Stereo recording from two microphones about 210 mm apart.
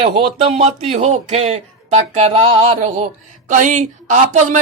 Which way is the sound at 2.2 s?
25° right (ahead or behind).